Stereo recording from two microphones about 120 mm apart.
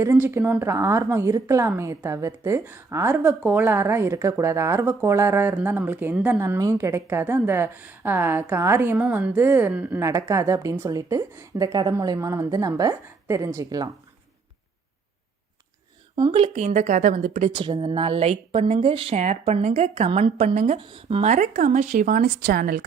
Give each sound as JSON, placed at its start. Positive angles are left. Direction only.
{"t": 0.0, "sound": "a woman's voice", "side_deg": -20}
{"t": 6.4, "sound": "a woman's voice", "side_deg": -25}
{"t": 10.0, "sound": "a woman's voice", "side_deg": -25}
{"t": 16.3, "sound": "speech", "side_deg": -60}
{"t": 17.5, "sound": "a woman's voice", "side_deg": -45}
{"t": 19.2, "sound": "a woman's voice", "side_deg": -70}
{"t": 20.7, "sound": "a woman's voice", "side_deg": -45}
{"t": 21.2, "sound": "speech", "side_deg": -90}